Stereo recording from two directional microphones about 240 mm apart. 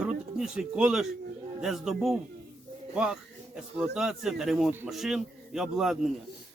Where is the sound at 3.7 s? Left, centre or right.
Centre.